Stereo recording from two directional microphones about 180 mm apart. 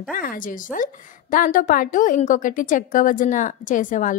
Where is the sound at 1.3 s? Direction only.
45° left (ahead or behind).